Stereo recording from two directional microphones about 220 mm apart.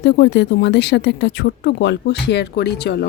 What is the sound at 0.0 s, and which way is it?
A woman's voice, 50° left (ahead or behind).